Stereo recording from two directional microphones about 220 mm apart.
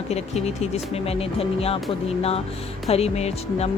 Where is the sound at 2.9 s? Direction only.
30° left (ahead or behind).